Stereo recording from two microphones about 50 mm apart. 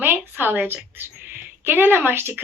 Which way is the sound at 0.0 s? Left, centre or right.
Right.